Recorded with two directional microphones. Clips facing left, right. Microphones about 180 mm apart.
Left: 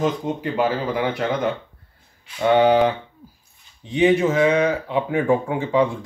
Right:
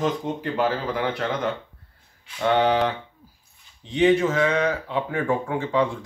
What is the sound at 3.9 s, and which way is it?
Speech, 10° left (ahead or behind).